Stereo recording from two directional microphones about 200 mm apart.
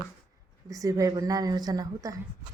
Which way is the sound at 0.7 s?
15° right (ahead or behind).